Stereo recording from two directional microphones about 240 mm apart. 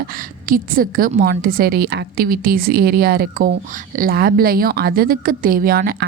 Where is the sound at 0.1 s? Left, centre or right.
Right.